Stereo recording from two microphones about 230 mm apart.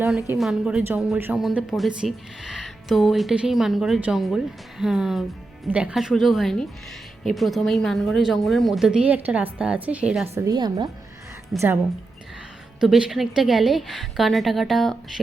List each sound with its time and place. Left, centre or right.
0.0 s a woman's voice: centre
10.3 s a woman's voice: centre
12.8 s a woman's voice: centre